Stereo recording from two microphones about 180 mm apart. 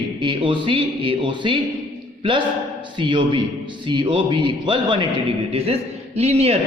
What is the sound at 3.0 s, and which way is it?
A man's voice, 25° right (ahead or behind).